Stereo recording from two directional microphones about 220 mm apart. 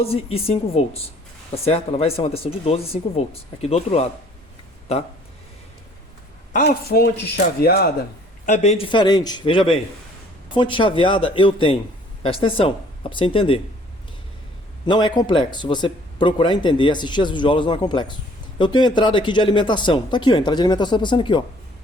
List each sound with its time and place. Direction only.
0.0 s speech: 25° left (ahead or behind)
6.5 s a man's voice: 40° left (ahead or behind)
8.4 s speech: 35° left (ahead or behind)
14.8 s speech: 20° left (ahead or behind)